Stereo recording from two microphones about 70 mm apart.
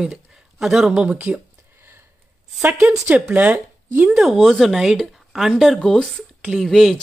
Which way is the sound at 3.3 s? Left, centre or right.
Right.